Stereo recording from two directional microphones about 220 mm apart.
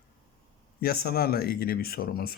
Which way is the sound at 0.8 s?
45° left (ahead or behind).